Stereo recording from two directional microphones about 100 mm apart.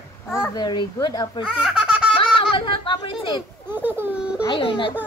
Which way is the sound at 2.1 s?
60° left (ahead or behind).